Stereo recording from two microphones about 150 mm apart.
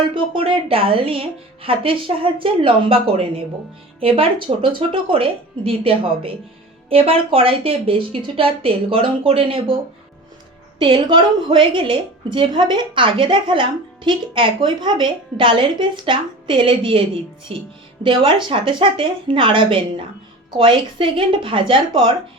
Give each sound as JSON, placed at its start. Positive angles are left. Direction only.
{"t": 0.1, "sound": "a woman's voice", "side_deg": -35}
{"t": 10.8, "sound": "a woman's voice", "side_deg": -35}